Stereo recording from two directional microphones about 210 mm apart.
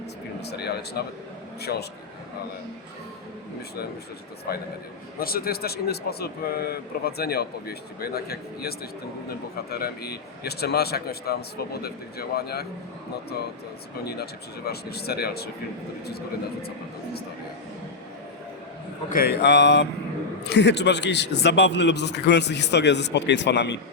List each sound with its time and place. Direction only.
0.4 s a man's voice: 50° left (ahead or behind)
4.5 s a man's voice: 45° left (ahead or behind)
14.0 s a man's voice: 50° left (ahead or behind)
19.1 s a man's voice: 50° left (ahead or behind)